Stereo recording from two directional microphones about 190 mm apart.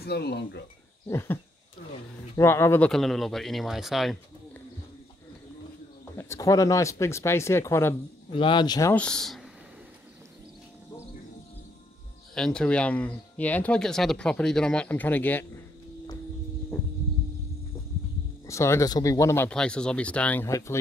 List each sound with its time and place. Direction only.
0.0 s speech: 60° left (ahead or behind)
1.0 s speech: 10° left (ahead or behind)
6.1 s speech: 15° left (ahead or behind)
8.3 s speech: 25° left (ahead or behind)
8.9 s speech: 5° left (ahead or behind)
12.4 s speech: 5° left (ahead or behind)
18.5 s speech: 15° left (ahead or behind)